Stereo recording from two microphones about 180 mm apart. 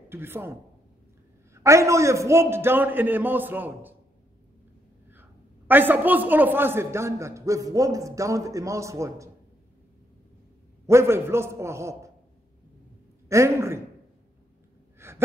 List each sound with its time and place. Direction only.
0.1 s a man's voice: 10° right (ahead or behind)
1.5 s a man's voice: 15° right (ahead or behind)
5.1 s a man's voice: 10° right (ahead or behind)
10.9 s a man's voice: 15° right (ahead or behind)
13.3 s a man's voice: 15° right (ahead or behind)
15.0 s gasp: 15° right (ahead or behind)